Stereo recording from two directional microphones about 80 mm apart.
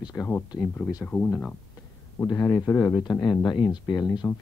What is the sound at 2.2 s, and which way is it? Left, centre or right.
Speech, left.